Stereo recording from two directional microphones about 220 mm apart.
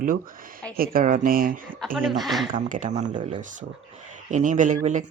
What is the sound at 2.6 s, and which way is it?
Speech, 35° right (ahead or behind).